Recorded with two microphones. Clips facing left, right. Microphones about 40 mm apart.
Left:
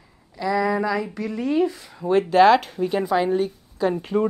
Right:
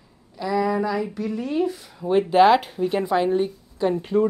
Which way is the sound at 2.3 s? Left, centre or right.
Centre.